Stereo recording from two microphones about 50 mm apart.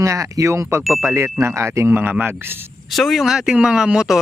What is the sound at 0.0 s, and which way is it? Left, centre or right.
Speech, right.